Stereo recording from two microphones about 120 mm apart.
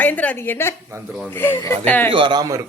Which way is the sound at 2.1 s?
40° right (ahead or behind).